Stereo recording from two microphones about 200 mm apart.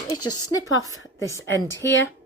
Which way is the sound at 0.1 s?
20° left (ahead or behind).